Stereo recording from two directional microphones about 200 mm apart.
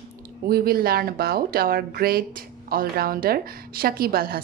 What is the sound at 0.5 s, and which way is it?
Speech, 50° right (ahead or behind).